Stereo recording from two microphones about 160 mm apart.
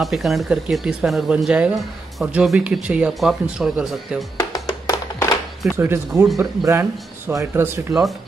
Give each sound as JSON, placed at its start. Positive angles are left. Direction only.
{"t": 0.0, "sound": "speech", "side_deg": 0}
{"t": 4.6, "sound": "music", "side_deg": 20}
{"t": 5.8, "sound": "speech", "side_deg": -15}